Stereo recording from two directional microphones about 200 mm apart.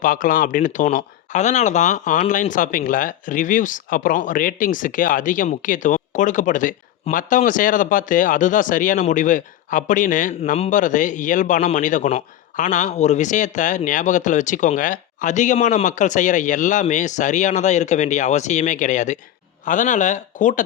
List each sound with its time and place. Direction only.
0.0 s speech: 45° left (ahead or behind)